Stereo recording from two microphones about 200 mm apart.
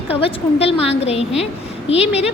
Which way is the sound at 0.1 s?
30° left (ahead or behind).